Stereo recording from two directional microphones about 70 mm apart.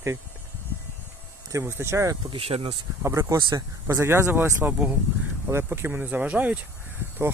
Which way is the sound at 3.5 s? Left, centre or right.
Right.